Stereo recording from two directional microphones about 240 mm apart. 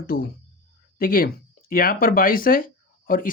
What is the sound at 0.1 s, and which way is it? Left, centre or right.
Speech, left.